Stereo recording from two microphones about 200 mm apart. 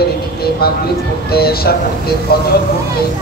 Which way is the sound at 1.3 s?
50° left (ahead or behind).